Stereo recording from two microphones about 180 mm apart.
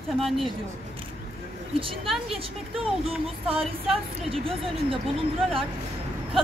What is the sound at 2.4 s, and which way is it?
Music, 30° right (ahead or behind).